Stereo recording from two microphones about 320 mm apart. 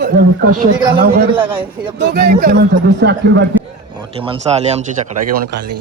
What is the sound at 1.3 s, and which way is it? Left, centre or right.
Speech, centre.